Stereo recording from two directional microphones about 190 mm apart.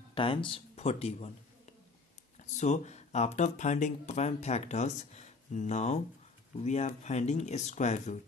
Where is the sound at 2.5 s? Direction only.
35° left (ahead or behind).